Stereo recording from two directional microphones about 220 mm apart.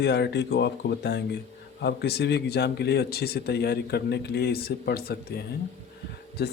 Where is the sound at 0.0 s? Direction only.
50° left (ahead or behind).